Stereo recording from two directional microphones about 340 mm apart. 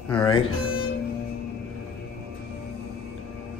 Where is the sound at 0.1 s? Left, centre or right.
Centre.